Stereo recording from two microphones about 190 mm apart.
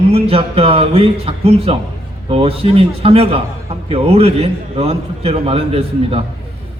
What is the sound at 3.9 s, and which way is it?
Speech, 30° right (ahead or behind).